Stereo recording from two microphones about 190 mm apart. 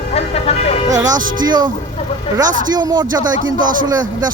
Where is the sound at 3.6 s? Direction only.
45° right (ahead or behind).